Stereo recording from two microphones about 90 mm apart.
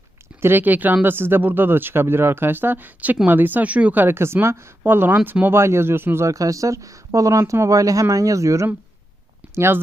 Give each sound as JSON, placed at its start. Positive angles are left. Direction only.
{"t": 0.4, "sound": "speech", "side_deg": -20}